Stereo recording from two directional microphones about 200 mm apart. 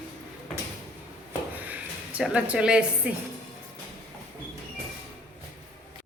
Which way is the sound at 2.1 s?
5° right (ahead or behind).